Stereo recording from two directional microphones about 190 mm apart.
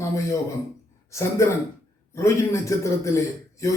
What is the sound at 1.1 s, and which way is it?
A man's voice, 15° left (ahead or behind).